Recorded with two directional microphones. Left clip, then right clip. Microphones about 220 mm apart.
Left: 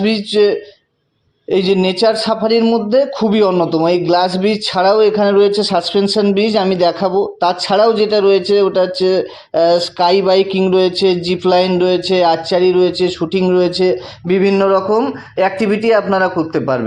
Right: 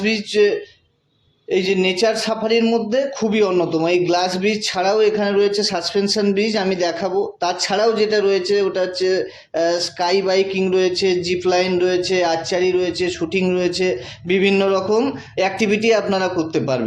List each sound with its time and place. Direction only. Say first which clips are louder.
0.0 s a man's voice: left 4 dB; 30° left (ahead or behind)